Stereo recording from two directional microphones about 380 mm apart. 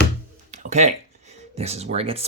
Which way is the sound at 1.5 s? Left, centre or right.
Centre.